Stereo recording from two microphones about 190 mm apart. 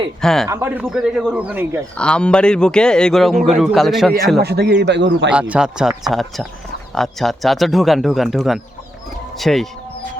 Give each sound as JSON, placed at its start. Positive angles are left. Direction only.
{"t": 0.2, "sound": "a man's voice", "side_deg": 0}
{"t": 0.4, "sound": "speech", "side_deg": -15}
{"t": 2.0, "sound": "a man's voice", "side_deg": 5}
{"t": 4.4, "sound": "a man's voice", "side_deg": -60}
{"t": 5.3, "sound": "a man's voice", "side_deg": -5}